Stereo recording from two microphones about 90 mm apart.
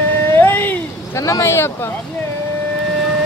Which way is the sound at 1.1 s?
35° left (ahead or behind).